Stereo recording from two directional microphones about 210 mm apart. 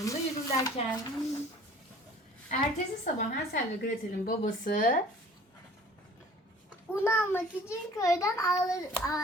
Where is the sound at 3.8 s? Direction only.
40° left (ahead or behind).